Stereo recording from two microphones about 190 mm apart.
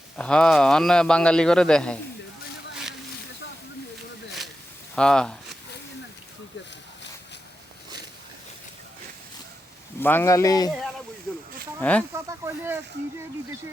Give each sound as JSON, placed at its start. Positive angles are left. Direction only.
{"t": 0.2, "sound": "a man's voice", "side_deg": 5}
{"t": 4.9, "sound": "a man's voice", "side_deg": 5}
{"t": 10.0, "sound": "speech", "side_deg": 10}
{"t": 11.8, "sound": "speech", "side_deg": 5}
{"t": 12.1, "sound": "speech", "side_deg": -15}